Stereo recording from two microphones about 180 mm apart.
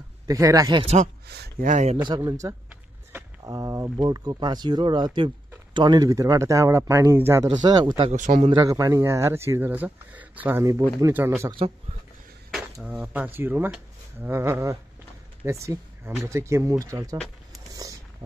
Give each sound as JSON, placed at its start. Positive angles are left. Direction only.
{"t": 0.3, "sound": "speech", "side_deg": -20}
{"t": 1.2, "sound": "speech", "side_deg": -65}
{"t": 1.7, "sound": "speech", "side_deg": -40}
{"t": 2.0, "sound": "speech", "side_deg": -25}
{"t": 8.0, "sound": "speech", "side_deg": -40}
{"t": 8.5, "sound": "speech", "side_deg": -20}
{"t": 12.8, "sound": "speech", "side_deg": -10}